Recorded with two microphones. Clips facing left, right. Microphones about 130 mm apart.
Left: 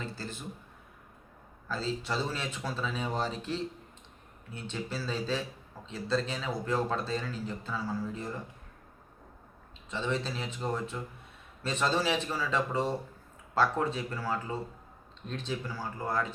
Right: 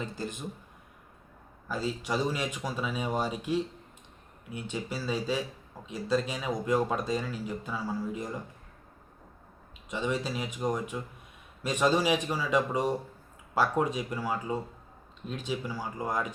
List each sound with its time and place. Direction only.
0.0 s speech: 15° right (ahead or behind)
1.6 s speech: 15° right (ahead or behind)
9.9 s speech: 15° right (ahead or behind)